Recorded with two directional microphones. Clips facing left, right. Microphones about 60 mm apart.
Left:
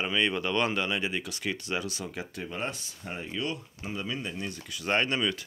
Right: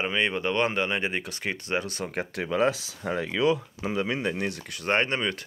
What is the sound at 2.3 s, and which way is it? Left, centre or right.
Speech, right.